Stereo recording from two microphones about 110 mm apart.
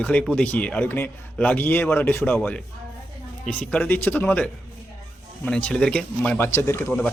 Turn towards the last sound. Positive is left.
turn(degrees=20)  # may be behind; listen again after turning